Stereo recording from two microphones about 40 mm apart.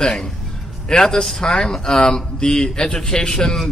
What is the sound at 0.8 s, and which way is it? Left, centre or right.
A man's voice, centre.